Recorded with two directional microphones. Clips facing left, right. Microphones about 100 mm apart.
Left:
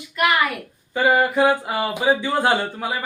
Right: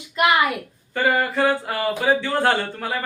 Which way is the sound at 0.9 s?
15° left (ahead or behind).